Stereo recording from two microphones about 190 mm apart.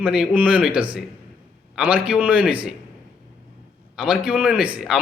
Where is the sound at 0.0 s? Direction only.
5° right (ahead or behind).